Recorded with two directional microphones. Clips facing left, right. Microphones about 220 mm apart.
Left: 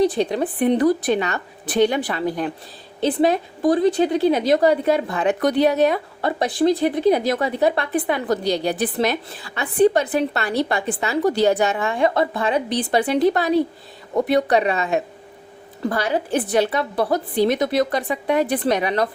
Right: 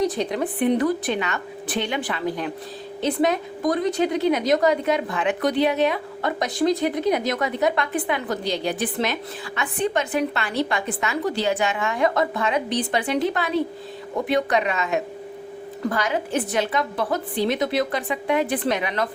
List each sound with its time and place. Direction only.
0.0 s a woman's voice: 30° left (ahead or behind)